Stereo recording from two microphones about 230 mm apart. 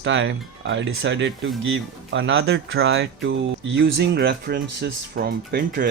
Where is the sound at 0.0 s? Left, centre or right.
Right.